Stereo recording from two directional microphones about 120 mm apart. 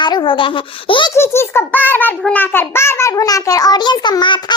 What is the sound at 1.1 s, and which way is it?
A child's voice, 20° left (ahead or behind).